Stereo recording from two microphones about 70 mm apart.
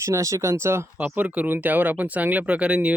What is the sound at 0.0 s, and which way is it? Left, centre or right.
Speech, right.